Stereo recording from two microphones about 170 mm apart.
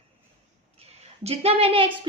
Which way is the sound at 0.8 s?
35° right (ahead or behind).